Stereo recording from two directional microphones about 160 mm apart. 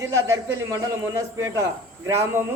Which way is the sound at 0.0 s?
20° right (ahead or behind).